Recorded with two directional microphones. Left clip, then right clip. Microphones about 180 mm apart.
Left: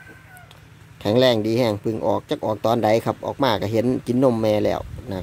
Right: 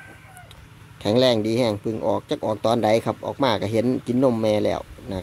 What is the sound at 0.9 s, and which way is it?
Speech, 10° left (ahead or behind).